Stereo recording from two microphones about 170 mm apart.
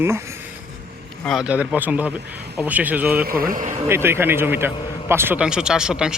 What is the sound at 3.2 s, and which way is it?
Speech, 60° right (ahead or behind).